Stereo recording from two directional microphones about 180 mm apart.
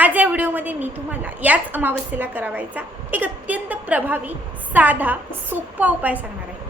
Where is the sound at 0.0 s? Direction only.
10° right (ahead or behind).